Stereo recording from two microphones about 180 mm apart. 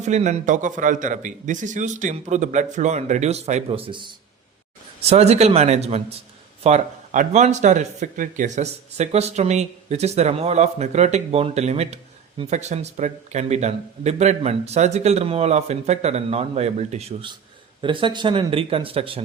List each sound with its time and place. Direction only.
0.0 s speech: 40° right (ahead or behind)